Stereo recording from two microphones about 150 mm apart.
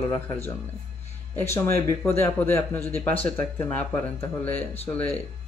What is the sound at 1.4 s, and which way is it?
Speech, 15° left (ahead or behind).